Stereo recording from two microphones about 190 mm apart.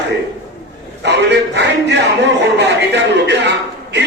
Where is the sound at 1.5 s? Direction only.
65° right (ahead or behind).